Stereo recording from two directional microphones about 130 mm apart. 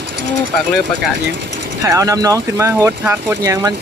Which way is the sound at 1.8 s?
25° right (ahead or behind).